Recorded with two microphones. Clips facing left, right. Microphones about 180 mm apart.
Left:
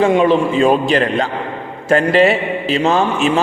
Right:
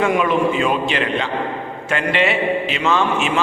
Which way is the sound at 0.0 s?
30° left (ahead or behind).